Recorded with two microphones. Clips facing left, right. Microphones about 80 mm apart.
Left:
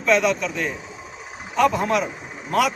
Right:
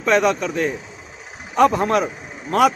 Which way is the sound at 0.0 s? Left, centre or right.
Right.